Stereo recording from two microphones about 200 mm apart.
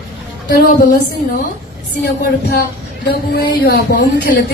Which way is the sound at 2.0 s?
55° left (ahead or behind).